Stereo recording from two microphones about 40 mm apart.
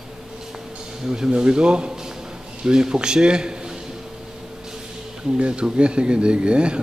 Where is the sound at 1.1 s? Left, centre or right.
Centre.